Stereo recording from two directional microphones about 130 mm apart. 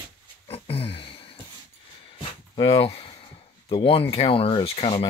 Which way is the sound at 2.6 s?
45° left (ahead or behind).